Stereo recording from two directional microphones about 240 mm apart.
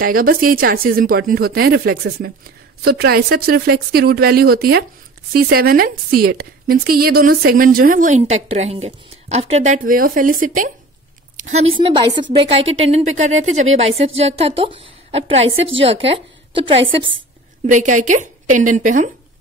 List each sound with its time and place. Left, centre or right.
0.0 s a woman's voice: right
17.6 s a woman's voice: right